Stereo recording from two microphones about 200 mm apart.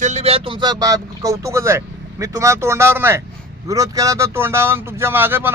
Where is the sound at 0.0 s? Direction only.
35° right (ahead or behind).